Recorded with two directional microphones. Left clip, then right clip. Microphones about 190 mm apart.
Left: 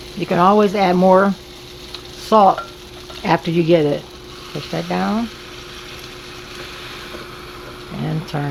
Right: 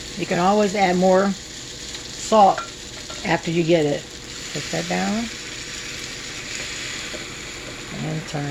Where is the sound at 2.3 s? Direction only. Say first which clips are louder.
Left 3 dB; 35° left (ahead or behind).